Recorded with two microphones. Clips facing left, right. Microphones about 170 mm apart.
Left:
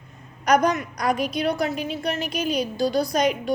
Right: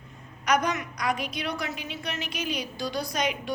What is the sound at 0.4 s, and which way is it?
A woman's voice, 35° left (ahead or behind).